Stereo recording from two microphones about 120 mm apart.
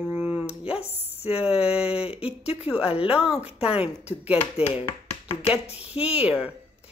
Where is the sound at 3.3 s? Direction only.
55° left (ahead or behind).